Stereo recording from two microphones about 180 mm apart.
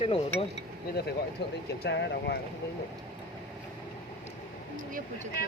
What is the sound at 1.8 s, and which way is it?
Speech, 70° left (ahead or behind).